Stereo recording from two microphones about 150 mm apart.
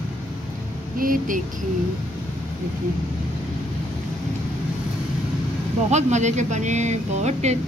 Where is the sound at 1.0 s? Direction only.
65° right (ahead or behind).